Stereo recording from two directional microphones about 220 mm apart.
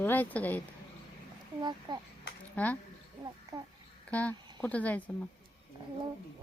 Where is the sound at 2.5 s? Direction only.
5° left (ahead or behind).